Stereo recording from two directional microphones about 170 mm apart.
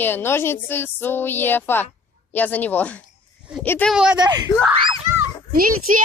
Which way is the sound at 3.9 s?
5° right (ahead or behind).